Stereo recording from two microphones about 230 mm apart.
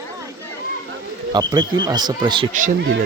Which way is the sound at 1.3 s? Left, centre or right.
Centre.